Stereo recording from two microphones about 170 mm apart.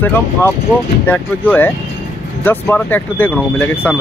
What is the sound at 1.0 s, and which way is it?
Speech, 10° left (ahead or behind).